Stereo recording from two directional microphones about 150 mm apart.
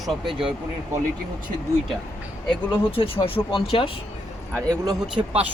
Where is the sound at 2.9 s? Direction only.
40° left (ahead or behind).